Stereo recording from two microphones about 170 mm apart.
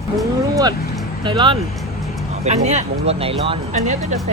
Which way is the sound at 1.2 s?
30° right (ahead or behind).